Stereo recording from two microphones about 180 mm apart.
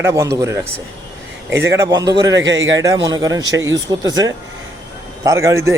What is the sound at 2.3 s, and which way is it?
Speech, 85° right.